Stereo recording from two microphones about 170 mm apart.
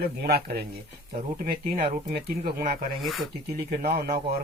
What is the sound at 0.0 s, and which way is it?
Speech, 65° right (ahead or behind).